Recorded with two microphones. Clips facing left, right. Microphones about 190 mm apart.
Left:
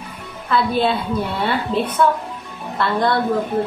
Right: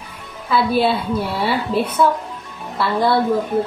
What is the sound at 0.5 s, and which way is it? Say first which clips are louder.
A woman's voice: right 1 dB; 5° right (ahead or behind).